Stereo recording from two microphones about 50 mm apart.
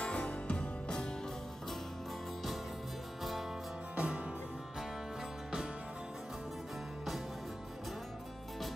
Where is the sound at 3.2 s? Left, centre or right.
Centre.